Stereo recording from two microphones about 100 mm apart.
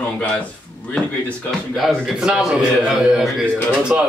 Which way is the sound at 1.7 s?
5° right (ahead or behind).